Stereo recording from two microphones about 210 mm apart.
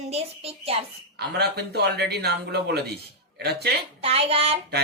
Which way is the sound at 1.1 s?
50° right (ahead or behind).